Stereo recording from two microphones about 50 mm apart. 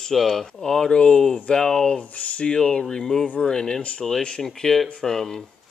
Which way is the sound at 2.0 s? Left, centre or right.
Left.